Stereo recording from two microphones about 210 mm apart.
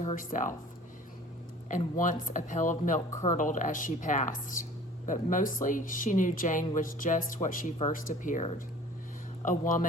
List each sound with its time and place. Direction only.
0.0 s speech: 35° left (ahead or behind)
1.6 s speech: 40° left (ahead or behind)